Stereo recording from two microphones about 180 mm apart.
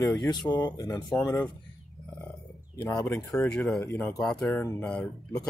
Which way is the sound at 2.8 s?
15° left (ahead or behind).